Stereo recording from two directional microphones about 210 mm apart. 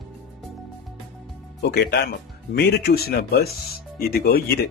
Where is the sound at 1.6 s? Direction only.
50° left (ahead or behind).